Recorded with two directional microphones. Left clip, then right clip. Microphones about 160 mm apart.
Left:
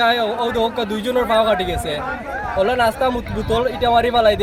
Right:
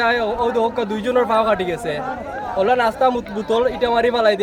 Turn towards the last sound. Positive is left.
turn(degrees=-5)  # may be behind; listen again after turning